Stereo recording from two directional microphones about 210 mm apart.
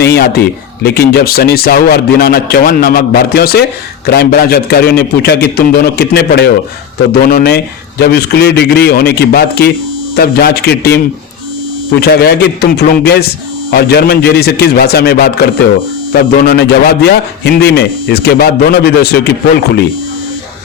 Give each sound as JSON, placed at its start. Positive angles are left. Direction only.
{"t": 0.0, "sound": "speech", "side_deg": 50}
{"t": 11.9, "sound": "speech", "side_deg": 50}
{"t": 16.5, "sound": "speech", "side_deg": 50}